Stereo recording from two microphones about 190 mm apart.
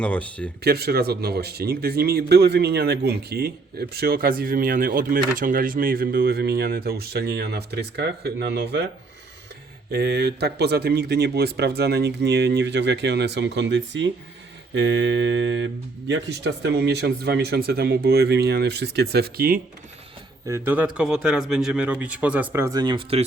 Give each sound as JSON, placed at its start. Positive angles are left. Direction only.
{"t": 0.0, "sound": "speech", "side_deg": 5}
{"t": 0.6, "sound": "speech", "side_deg": -55}
{"t": 9.9, "sound": "speech", "side_deg": -60}
{"t": 20.5, "sound": "speech", "side_deg": -10}